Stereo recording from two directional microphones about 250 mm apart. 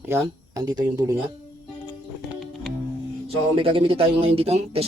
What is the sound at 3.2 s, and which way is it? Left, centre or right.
Speech, right.